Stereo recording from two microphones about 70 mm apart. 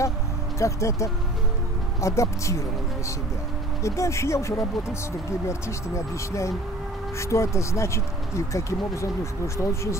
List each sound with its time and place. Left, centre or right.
0.6 s speech: left
3.8 s speech: left